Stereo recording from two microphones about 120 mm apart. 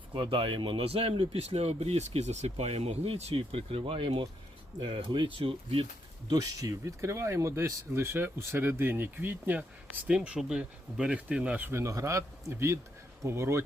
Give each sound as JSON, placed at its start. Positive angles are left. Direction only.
{"t": 0.1, "sound": "speech", "side_deg": -45}
{"t": 6.3, "sound": "speech", "side_deg": -30}